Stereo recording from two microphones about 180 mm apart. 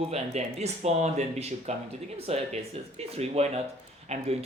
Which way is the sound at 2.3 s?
35° right (ahead or behind).